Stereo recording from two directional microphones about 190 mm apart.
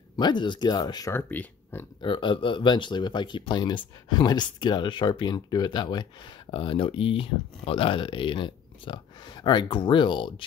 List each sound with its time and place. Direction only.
0.1 s speech: 25° left (ahead or behind)
2.0 s speech: 25° left (ahead or behind)